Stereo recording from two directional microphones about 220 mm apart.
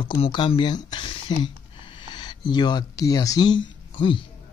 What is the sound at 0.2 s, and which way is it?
Speech, 25° left (ahead or behind).